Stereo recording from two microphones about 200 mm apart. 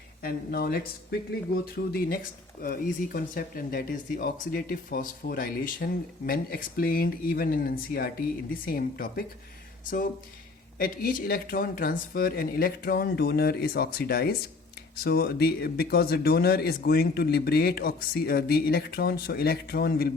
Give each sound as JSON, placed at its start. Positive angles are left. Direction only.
{"t": 0.2, "sound": "speech", "side_deg": 50}
{"t": 10.8, "sound": "speech", "side_deg": 45}